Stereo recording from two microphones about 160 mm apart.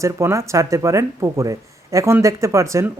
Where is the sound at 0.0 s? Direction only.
20° right (ahead or behind).